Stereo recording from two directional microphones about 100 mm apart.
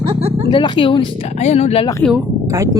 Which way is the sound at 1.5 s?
90° left.